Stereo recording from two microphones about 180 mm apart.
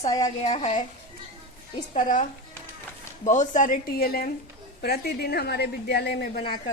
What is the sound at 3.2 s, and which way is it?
A woman's voice, 45° left (ahead or behind).